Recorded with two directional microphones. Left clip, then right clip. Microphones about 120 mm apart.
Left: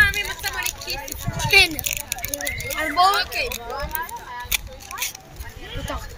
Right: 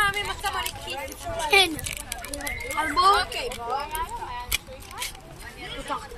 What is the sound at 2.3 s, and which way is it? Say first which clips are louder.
Speech: left 3 dB; 25° left (ahead or behind).